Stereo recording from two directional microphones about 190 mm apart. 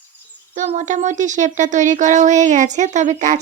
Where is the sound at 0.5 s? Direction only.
40° right (ahead or behind).